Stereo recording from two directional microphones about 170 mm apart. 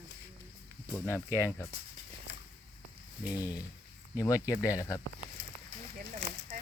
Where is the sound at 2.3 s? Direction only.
90° left.